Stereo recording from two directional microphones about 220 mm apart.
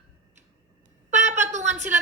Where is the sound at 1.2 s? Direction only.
35° right (ahead or behind).